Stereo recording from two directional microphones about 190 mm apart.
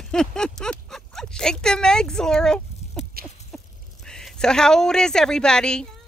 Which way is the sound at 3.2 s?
50° right (ahead or behind).